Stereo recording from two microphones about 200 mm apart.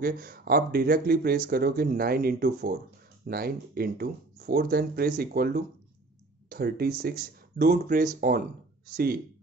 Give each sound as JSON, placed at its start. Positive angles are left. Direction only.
{"t": 0.0, "sound": "speech", "side_deg": -50}